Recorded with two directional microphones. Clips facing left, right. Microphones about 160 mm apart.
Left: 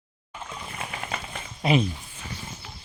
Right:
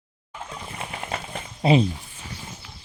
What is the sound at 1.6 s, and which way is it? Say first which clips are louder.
Speech: right 4 dB; 30° right (ahead or behind).